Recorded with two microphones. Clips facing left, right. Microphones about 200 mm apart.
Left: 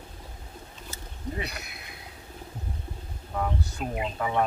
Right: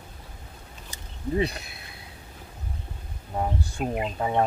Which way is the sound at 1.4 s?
30° right (ahead or behind).